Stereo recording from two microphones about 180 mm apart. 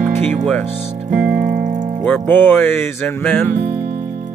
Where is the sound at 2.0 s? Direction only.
10° left (ahead or behind).